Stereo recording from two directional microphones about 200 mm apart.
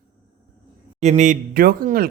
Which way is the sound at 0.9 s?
35° right (ahead or behind).